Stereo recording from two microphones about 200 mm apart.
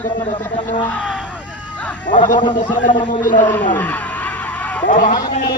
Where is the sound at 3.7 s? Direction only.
10° left (ahead or behind).